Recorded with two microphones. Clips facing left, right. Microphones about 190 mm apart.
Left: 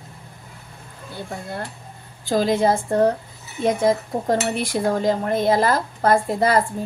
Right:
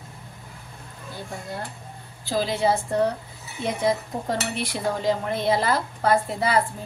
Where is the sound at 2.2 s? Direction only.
50° left (ahead or behind).